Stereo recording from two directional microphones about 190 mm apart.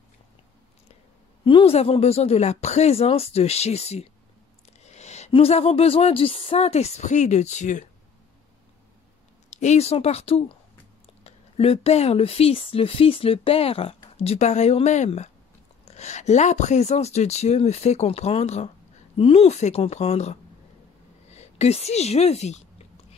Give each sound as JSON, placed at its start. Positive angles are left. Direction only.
{"t": 1.4, "sound": "speech", "side_deg": 25}
{"t": 9.5, "sound": "speech", "side_deg": 35}
{"t": 21.4, "sound": "a woman's voice", "side_deg": 35}